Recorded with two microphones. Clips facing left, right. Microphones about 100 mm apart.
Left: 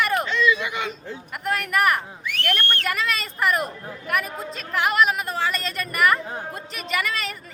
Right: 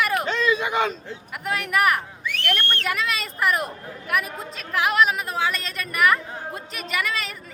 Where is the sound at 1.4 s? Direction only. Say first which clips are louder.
Even; centre (ahead or behind).